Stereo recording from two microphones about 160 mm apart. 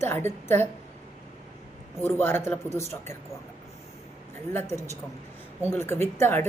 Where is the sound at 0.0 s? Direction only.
15° left (ahead or behind).